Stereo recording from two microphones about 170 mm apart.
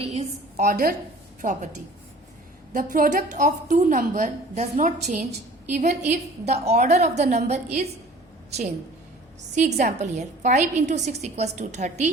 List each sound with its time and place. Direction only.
0.0 s a woman's voice: 40° right (ahead or behind)
2.7 s a woman's voice: 55° right (ahead or behind)
9.6 s a woman's voice: 45° right (ahead or behind)